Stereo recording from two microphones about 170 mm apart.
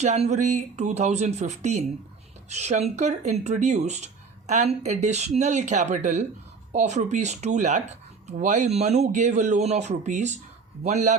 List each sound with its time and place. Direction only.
0.0 s speech: 40° right (ahead or behind)